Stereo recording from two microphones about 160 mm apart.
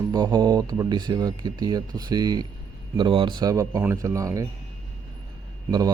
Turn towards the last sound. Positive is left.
turn(degrees=-25)  # may be behind; listen again after turning